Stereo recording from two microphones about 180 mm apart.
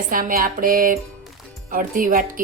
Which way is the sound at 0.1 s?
50° right (ahead or behind).